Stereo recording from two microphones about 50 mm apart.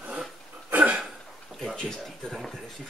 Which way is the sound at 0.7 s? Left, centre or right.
Right.